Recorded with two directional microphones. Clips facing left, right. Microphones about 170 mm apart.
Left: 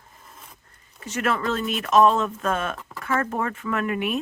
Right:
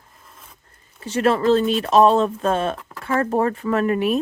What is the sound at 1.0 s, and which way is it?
Speech, 30° right (ahead or behind).